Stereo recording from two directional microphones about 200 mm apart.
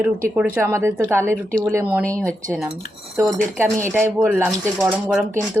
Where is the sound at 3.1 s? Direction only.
15° right (ahead or behind).